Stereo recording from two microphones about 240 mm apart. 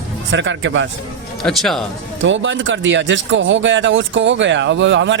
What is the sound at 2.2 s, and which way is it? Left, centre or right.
Speech, right.